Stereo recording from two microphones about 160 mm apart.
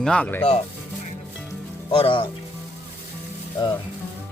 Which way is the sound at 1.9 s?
30° left (ahead or behind).